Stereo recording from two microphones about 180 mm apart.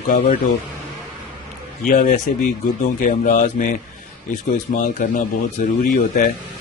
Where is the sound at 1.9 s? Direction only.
50° left (ahead or behind).